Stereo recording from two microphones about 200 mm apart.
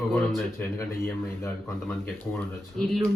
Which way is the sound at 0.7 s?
15° left (ahead or behind).